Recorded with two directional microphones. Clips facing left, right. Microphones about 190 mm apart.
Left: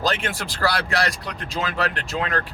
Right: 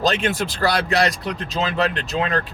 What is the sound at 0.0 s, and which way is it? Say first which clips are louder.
A man's voice: right 5 dB; 20° right (ahead or behind).